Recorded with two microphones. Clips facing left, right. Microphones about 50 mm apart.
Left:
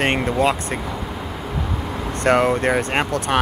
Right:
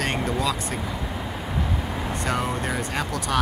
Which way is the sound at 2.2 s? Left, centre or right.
Left.